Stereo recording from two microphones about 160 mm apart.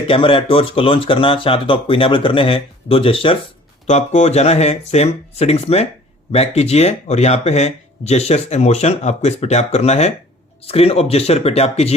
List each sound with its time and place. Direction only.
0.1 s speech: 35° left (ahead or behind)
3.8 s speech: 45° left (ahead or behind)